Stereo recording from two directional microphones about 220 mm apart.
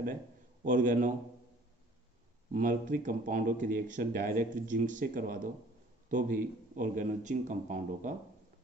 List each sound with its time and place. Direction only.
0.7 s speech: 35° right (ahead or behind)
2.5 s speech: 40° right (ahead or behind)